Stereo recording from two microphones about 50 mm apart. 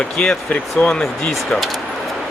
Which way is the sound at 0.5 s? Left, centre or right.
Left.